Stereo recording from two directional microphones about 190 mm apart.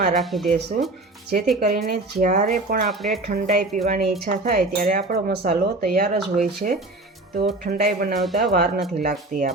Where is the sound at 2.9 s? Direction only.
Centre (ahead or behind).